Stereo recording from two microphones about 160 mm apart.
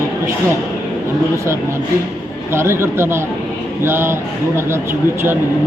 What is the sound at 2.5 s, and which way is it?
Speech, 15° right (ahead or behind).